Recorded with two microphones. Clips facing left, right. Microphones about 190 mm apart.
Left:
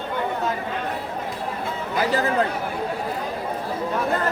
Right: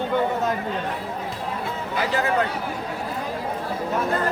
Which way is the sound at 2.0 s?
35° left (ahead or behind).